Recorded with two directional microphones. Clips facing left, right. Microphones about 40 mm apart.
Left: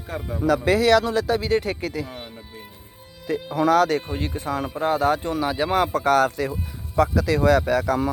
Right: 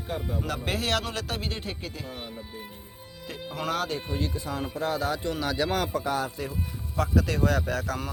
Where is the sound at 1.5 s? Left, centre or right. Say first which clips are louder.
Left 13 dB; left.